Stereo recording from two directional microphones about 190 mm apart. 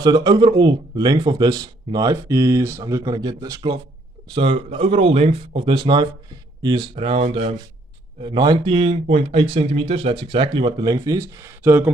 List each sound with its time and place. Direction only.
0.0 s speech: 20° right (ahead or behind)